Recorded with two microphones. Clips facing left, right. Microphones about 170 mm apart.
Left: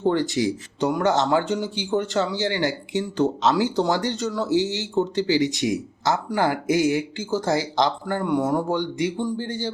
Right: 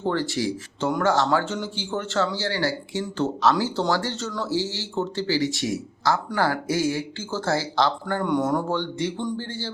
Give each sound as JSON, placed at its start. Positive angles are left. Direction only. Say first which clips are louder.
{"t": 0.0, "sound": "speech", "louder": "left 4 dB", "side_deg": 15}